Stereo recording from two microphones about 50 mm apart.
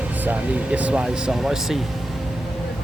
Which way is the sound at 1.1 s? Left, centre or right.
Centre.